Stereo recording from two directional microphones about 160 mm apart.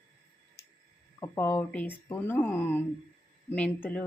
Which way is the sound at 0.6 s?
90° left.